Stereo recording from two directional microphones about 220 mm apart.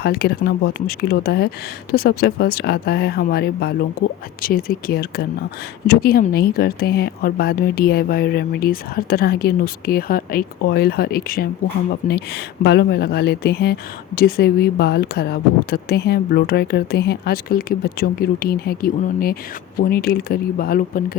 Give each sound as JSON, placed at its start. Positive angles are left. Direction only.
{"t": 0.0, "sound": "speech", "side_deg": 45}